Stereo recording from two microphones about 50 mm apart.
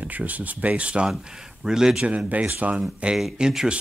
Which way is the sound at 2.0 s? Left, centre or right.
Right.